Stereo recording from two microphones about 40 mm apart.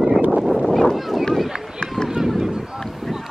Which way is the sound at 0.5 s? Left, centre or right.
Centre.